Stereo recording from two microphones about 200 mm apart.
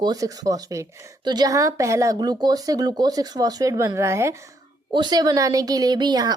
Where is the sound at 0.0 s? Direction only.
15° right (ahead or behind).